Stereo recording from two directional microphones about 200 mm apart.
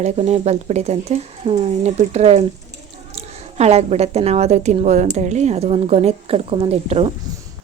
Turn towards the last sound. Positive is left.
turn(degrees=-30)  # may be behind; listen again after turning